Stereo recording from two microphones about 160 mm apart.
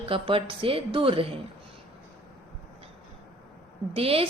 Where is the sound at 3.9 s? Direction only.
35° right (ahead or behind).